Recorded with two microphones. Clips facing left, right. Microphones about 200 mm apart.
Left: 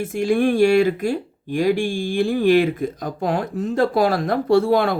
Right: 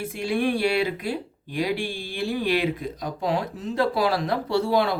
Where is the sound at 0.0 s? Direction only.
50° left (ahead or behind).